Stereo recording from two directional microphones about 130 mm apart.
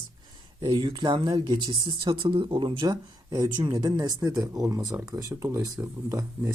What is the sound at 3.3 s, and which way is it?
Speech, 30° right (ahead or behind).